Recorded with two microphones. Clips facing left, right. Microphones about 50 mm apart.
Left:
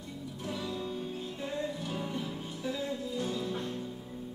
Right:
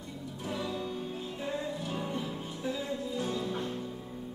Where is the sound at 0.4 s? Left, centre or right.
Centre.